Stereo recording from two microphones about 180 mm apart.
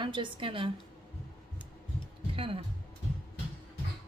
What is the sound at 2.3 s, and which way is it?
Music, 30° right (ahead or behind).